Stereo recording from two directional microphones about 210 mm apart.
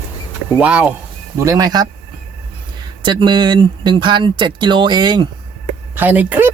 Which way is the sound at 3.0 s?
20° right (ahead or behind).